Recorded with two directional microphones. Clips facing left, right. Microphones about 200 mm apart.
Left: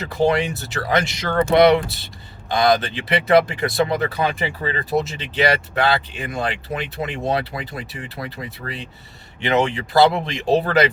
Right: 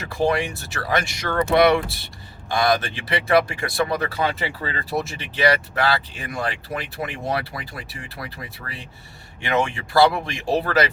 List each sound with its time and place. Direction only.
0.1 s speech: 20° left (ahead or behind)